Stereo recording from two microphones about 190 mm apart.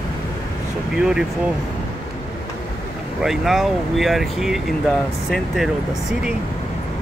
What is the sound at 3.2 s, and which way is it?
Speech, centre (ahead or behind).